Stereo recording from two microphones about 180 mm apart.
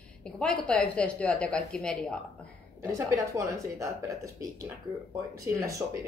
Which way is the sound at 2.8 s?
15° right (ahead or behind).